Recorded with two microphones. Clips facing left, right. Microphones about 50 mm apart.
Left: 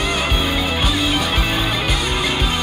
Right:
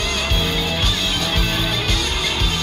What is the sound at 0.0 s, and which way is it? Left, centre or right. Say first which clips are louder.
Music: left 2 dB; centre.